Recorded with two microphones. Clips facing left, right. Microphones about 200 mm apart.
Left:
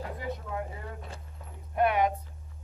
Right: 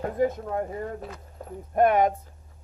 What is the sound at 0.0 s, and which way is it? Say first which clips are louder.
Speech: right 11 dB; 45° right (ahead or behind).